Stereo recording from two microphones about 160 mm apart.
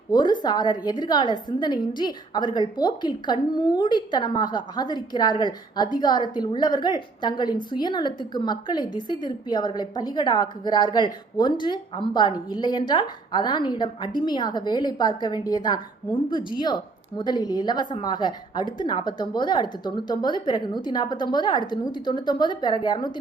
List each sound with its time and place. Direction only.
0.1 s a woman's voice: 25° left (ahead or behind)